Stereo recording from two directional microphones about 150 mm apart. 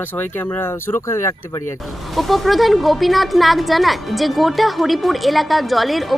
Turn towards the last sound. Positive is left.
turn(degrees=0)  # may be behind; listen again after turning